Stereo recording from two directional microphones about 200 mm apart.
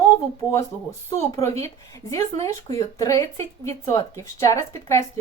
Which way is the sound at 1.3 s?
15° left (ahead or behind).